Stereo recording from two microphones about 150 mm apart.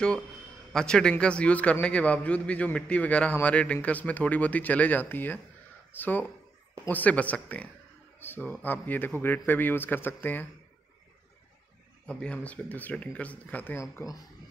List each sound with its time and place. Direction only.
0.7 s a man's voice: 5° left (ahead or behind)
12.1 s a man's voice: 5° left (ahead or behind)